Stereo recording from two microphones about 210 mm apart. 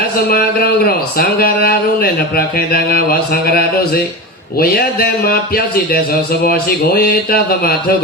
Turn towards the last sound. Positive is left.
turn(degrees=45)  # may be behind; listen again after turning